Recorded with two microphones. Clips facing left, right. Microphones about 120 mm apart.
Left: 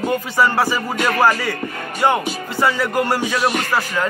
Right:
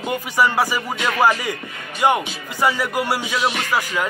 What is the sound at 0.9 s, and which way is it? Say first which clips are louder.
Speech: left 3 dB; 40° left (ahead or behind).